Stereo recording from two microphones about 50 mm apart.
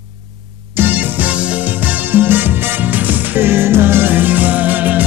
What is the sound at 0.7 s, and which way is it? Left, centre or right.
Music, right.